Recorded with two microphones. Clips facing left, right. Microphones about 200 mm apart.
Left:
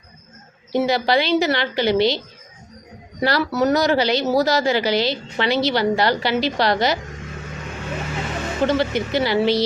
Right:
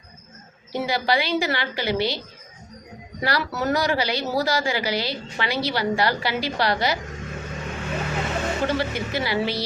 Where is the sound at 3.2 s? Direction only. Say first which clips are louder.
Left 6 dB; 25° left (ahead or behind).